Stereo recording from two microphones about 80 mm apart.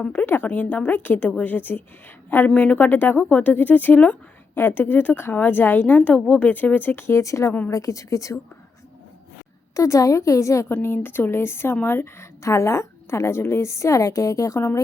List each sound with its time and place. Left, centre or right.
0.1 s a woman's voice: left
7.2 s a woman's voice: left
9.7 s a woman's voice: left
10.8 s a woman's voice: left